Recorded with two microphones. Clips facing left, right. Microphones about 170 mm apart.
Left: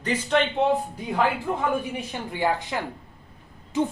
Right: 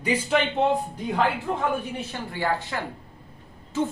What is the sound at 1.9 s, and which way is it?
Speech, 15° left (ahead or behind).